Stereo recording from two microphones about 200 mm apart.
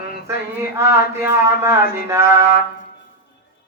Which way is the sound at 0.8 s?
15° right (ahead or behind).